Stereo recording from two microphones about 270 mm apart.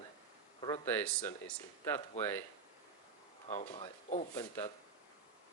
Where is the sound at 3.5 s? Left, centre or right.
Left.